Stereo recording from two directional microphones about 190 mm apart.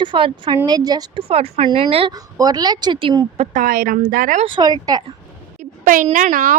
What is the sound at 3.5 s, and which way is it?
Speech, 45° right (ahead or behind).